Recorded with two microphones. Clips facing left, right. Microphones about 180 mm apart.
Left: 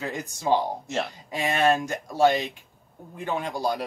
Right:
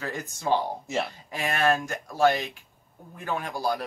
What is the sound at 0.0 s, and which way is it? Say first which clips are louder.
Speech: left 2 dB; 15° left (ahead or behind).